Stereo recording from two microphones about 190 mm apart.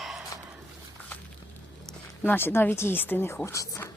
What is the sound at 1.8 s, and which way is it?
Speech, 10° left (ahead or behind).